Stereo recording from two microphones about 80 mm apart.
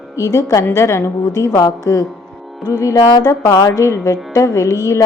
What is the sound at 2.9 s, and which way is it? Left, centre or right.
Speech, left.